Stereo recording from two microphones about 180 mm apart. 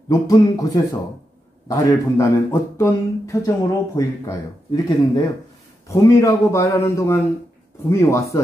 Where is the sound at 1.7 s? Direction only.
20° left (ahead or behind).